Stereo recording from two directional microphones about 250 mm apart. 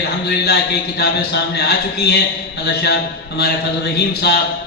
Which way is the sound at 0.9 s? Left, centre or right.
Left.